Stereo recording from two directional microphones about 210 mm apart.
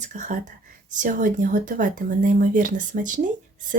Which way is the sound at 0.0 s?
35° right (ahead or behind).